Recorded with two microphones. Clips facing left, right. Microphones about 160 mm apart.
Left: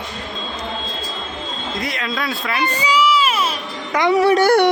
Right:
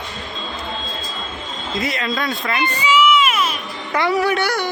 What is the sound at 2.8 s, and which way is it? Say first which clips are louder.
Baby cry: right 2 dB; 35° left (ahead or behind).